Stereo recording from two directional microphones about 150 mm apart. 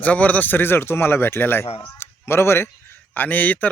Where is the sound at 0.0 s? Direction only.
10° left (ahead or behind).